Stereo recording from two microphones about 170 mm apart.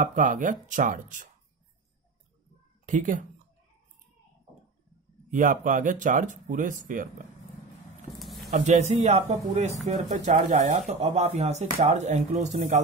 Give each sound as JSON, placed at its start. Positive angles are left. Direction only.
{"t": 0.0, "sound": "speech", "side_deg": -50}
{"t": 2.9, "sound": "speech", "side_deg": -50}
{"t": 5.3, "sound": "speech", "side_deg": -50}
{"t": 8.2, "sound": "a sound", "side_deg": 0}
{"t": 8.5, "sound": "speech", "side_deg": -45}